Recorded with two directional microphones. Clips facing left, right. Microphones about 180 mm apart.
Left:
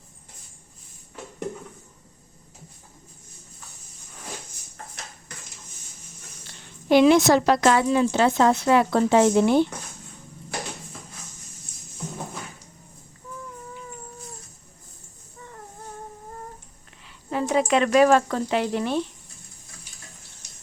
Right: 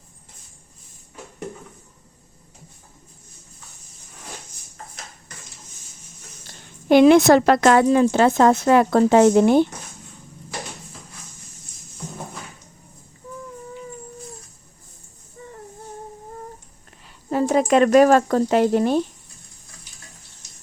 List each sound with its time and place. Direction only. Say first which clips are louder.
6.5 s a woman's voice: right 3 dB; 50° right (ahead or behind)
17.1 s speech: right 5 dB; 40° right (ahead or behind)